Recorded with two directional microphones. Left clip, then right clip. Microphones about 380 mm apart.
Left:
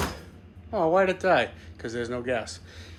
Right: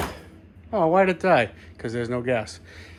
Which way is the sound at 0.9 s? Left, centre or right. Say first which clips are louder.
Right 3 dB; centre.